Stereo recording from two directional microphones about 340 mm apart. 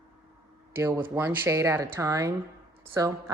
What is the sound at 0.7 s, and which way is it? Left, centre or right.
Speech, centre.